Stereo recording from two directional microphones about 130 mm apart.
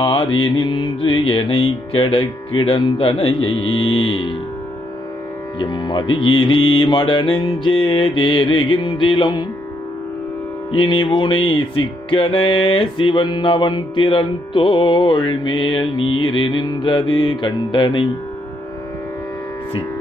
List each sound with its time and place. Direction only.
0.0 s music: 40° left (ahead or behind)
5.6 s music: 35° left (ahead or behind)
10.7 s music: 40° left (ahead or behind)